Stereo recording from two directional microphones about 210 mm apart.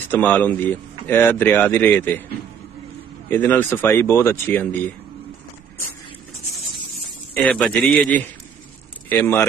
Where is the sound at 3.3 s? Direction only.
10° left (ahead or behind).